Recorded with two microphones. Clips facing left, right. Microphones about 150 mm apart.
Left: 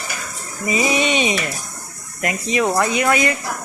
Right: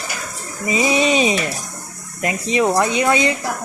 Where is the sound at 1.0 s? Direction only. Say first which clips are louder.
Right 3 dB; 35° right (ahead or behind).